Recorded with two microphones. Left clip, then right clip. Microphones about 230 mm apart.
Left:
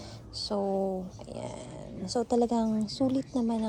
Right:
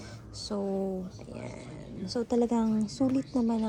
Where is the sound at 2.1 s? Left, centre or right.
Centre.